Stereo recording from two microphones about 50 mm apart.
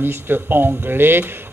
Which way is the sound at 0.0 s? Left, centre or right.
Right.